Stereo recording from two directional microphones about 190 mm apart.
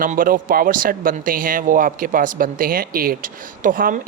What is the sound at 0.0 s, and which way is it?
Speech, 45° right (ahead or behind).